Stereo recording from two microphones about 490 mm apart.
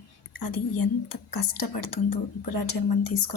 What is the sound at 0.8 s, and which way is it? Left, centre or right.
Speech, left.